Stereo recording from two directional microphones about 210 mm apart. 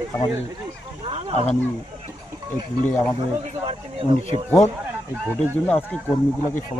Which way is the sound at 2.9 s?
10° left (ahead or behind).